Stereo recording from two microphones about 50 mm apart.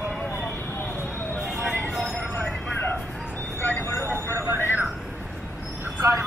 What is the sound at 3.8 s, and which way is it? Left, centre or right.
Vehicle, left.